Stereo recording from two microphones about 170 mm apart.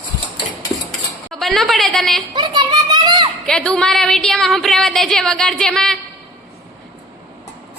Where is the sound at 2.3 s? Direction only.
25° right (ahead or behind).